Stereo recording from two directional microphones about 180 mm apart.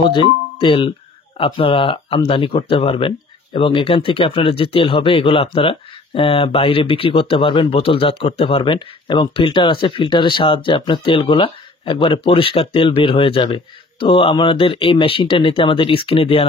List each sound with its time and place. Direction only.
0.0 s speech: 30° left (ahead or behind)